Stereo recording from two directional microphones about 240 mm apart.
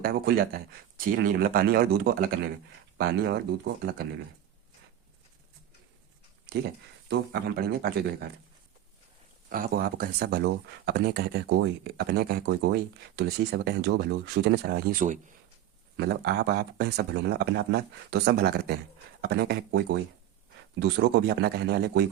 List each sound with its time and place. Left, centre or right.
0.0 s speech: right
7.1 s speech: right
9.5 s speech: right
16.0 s speech: right